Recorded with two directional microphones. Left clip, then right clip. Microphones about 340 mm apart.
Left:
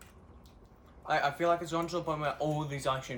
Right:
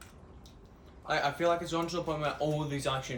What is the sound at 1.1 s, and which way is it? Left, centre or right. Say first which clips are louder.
Speech: even; centre.